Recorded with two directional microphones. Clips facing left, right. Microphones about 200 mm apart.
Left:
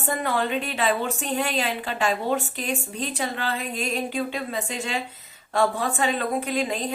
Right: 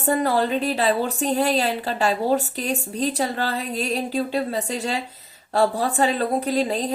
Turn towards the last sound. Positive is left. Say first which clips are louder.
# right 4 dB
turn(degrees=-35)  # may be behind; listen again after turning